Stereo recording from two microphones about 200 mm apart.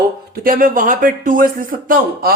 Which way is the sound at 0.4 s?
45° right (ahead or behind).